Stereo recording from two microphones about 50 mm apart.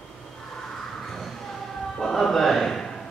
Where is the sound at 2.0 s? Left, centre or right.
Centre.